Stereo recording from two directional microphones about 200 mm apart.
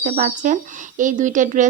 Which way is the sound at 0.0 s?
40° right (ahead or behind).